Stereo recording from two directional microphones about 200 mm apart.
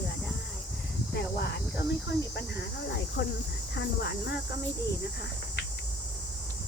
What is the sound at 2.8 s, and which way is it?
Speech, 55° left (ahead or behind).